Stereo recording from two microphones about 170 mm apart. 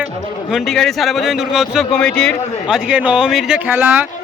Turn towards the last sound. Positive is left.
turn(degrees=-10)  # may be behind; listen again after turning